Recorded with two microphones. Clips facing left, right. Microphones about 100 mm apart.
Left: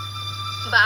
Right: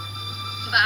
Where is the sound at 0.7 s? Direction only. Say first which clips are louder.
Left 3 dB; 30° left (ahead or behind).